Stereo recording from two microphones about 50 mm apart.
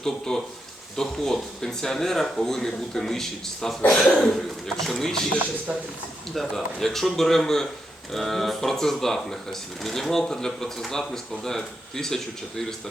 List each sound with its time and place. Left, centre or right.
0.0 s speech: centre
6.3 s a man's voice: centre